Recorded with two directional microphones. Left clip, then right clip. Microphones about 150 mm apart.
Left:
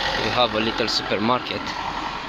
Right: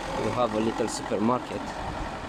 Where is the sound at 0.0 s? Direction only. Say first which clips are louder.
Left 8 dB; 90° right.